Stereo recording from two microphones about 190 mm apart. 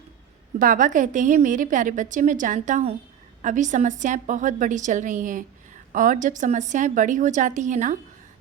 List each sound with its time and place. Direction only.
0.6 s a woman's voice: 45° right (ahead or behind)